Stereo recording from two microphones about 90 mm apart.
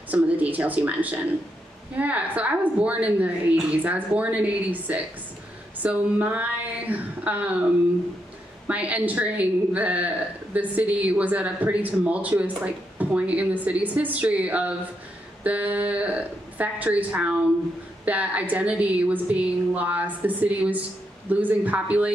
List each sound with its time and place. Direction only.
0.1 s a woman's voice: 15° right (ahead or behind)
8.6 s a woman's voice: 15° right (ahead or behind)